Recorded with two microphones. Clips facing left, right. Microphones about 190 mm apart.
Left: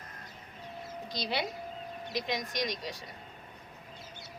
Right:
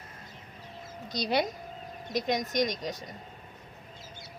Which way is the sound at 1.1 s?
45° right (ahead or behind).